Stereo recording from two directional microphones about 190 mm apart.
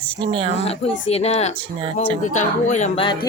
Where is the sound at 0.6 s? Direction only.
30° left (ahead or behind).